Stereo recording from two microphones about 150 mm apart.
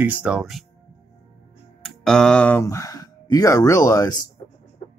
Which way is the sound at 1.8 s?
5° left (ahead or behind).